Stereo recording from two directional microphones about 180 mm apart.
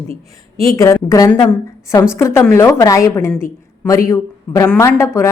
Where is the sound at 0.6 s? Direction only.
15° left (ahead or behind).